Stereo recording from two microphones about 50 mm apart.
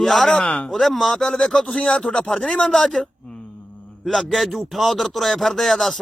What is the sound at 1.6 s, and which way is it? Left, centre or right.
Speech, left.